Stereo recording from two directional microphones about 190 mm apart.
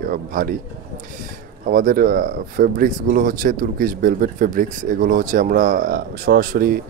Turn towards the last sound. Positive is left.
turn(degrees=-50)  # may be behind; listen again after turning